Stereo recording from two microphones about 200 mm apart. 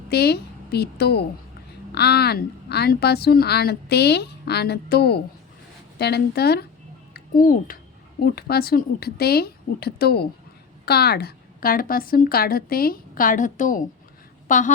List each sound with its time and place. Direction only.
0.1 s a woman's voice: 55° left (ahead or behind)